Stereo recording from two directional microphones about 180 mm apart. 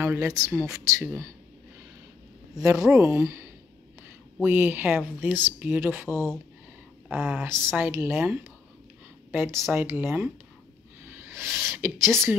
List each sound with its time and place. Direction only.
0.0 s speech: 15° right (ahead or behind)
2.6 s speech: 15° right (ahead or behind)